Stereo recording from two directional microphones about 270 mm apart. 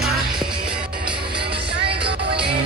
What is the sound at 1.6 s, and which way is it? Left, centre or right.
Music, right.